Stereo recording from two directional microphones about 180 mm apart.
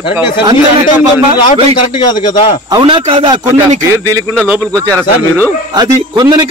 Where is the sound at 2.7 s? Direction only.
30° right (ahead or behind).